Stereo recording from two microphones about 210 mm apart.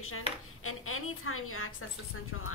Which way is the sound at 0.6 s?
90° left.